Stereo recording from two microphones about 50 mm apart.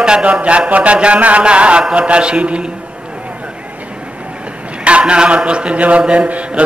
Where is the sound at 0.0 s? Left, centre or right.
Centre.